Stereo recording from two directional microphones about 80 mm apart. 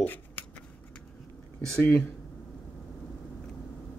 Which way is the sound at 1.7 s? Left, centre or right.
Left.